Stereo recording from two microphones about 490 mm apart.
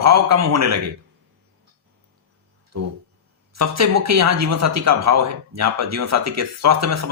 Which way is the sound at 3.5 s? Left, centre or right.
Right.